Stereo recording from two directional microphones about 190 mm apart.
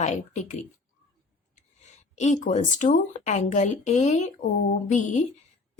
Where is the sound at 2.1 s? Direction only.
40° left (ahead or behind).